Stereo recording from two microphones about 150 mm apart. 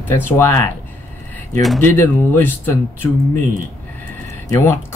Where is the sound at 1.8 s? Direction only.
15° left (ahead or behind).